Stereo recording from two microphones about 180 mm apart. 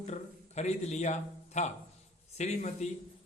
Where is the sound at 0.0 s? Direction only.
40° left (ahead or behind).